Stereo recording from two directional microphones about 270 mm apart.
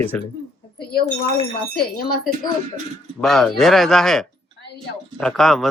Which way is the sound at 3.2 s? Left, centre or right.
Centre.